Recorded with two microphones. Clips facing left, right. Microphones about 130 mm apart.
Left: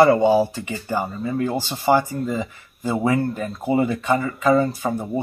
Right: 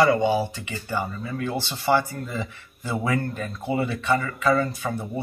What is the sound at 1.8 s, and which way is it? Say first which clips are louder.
Speech: left 4 dB; 15° left (ahead or behind).